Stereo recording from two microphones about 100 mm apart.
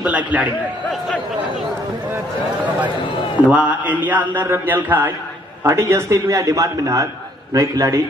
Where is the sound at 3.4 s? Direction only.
15° right (ahead or behind).